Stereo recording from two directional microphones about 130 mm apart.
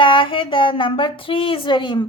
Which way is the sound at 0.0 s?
40° left (ahead or behind).